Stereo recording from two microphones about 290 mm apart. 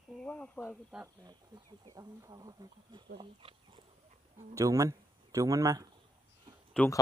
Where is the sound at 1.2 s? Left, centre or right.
Centre.